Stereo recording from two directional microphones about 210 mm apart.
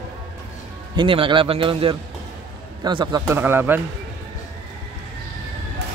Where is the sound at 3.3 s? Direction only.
10° right (ahead or behind).